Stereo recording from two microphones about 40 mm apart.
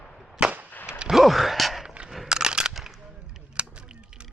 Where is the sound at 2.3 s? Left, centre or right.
Centre.